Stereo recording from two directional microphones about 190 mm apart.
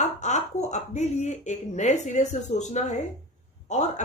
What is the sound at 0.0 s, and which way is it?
Speech, 40° left (ahead or behind).